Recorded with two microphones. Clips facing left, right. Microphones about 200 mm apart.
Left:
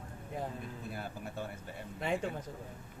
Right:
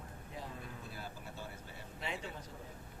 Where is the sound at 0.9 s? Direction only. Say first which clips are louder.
Left 6 dB; 55° left (ahead or behind).